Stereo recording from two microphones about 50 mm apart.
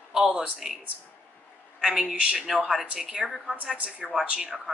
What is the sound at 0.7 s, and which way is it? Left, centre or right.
Speech, centre.